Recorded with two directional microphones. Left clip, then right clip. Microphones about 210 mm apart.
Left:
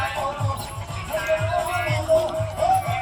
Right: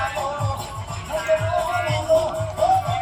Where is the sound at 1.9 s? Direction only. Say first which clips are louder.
Even; 20° right (ahead or behind).